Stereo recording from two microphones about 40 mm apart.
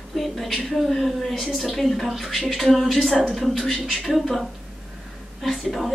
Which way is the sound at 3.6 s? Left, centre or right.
Centre.